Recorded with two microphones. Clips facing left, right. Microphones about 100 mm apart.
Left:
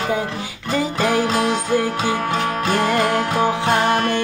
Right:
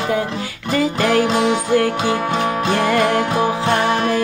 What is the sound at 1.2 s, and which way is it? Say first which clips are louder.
Music: right 2 dB; 20° right (ahead or behind).